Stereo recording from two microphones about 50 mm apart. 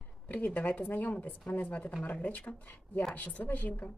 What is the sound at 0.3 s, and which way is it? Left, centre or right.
A woman's voice, left.